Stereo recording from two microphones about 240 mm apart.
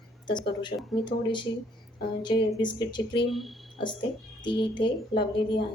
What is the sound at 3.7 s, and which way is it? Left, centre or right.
A woman's voice, centre.